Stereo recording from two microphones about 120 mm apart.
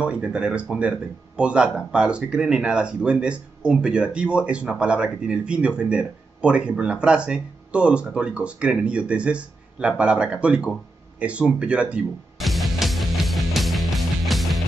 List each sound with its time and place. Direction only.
0.0 s speech: 10° right (ahead or behind)
11.1 s music: 10° right (ahead or behind)